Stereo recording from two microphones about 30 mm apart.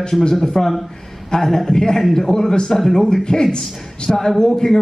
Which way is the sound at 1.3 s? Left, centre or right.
Left.